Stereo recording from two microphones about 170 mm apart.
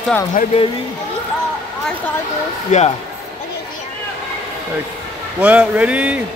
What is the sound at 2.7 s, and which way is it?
Speech, 45° left (ahead or behind).